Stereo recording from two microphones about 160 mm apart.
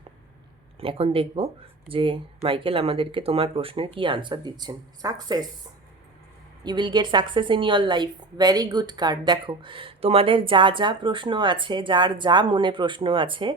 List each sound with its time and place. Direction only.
0.8 s a woman's voice: 35° right (ahead or behind)
6.7 s a woman's voice: 30° right (ahead or behind)